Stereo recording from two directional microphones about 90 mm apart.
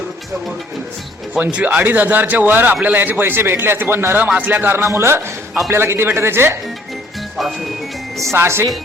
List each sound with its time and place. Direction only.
1.3 s a man's voice: 10° right (ahead or behind); by 6.6 s 25° right (ahead or behind)
7.3 s speech: centre (ahead or behind)
8.2 s a man's voice: 30° right (ahead or behind)